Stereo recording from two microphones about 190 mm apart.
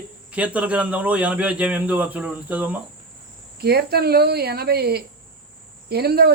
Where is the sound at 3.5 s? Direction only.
55° right (ahead or behind).